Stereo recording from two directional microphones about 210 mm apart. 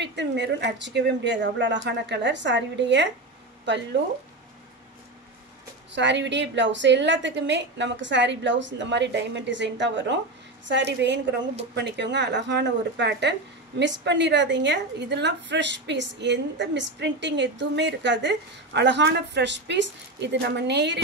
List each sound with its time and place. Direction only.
0.0 s speech: 55° right (ahead or behind)
5.9 s speech: 55° right (ahead or behind)